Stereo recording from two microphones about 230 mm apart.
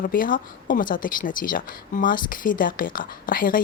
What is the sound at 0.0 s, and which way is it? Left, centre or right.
Speech, left.